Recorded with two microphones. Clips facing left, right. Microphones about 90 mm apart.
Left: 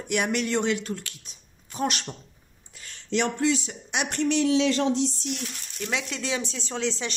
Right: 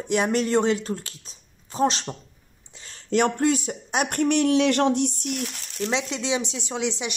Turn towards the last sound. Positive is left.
turn(degrees=-15)  # may be behind; listen again after turning